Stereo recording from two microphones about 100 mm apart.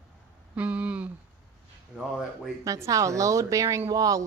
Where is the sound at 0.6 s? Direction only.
15° right (ahead or behind).